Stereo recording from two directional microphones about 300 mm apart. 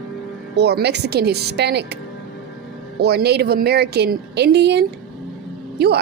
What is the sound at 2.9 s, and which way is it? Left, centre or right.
A woman's voice, right.